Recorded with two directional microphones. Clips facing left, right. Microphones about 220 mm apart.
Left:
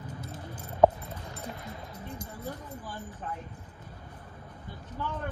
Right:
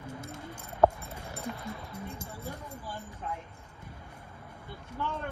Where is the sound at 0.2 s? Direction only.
25° right (ahead or behind).